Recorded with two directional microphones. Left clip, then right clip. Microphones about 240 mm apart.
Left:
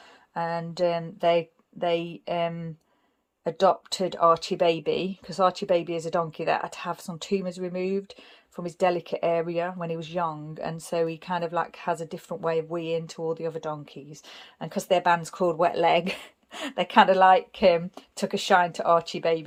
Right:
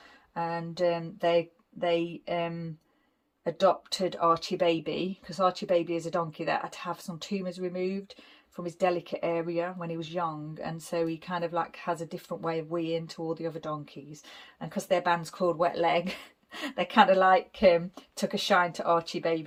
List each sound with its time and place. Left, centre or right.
0.3 s speech: centre